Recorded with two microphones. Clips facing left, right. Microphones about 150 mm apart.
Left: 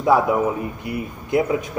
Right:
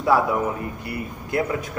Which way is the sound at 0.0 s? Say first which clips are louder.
Left 3 dB; 15° left (ahead or behind).